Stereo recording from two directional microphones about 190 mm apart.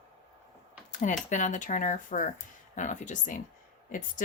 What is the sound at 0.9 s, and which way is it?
Speech, 40° left (ahead or behind).